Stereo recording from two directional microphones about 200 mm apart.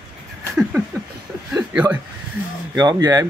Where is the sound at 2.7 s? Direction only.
20° right (ahead or behind).